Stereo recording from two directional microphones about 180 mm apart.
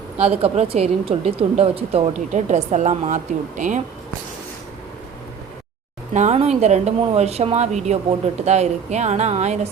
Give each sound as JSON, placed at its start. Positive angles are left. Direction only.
{"t": 0.2, "sound": "speech", "side_deg": -35}
{"t": 6.1, "sound": "speech", "side_deg": -40}